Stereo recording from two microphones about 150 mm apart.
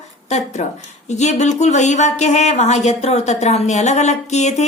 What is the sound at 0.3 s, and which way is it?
Speech, 50° left (ahead or behind).